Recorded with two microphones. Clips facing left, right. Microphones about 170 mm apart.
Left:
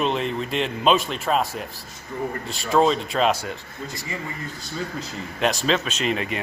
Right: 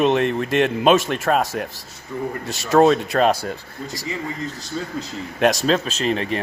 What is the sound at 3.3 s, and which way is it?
Speech, 35° right (ahead or behind).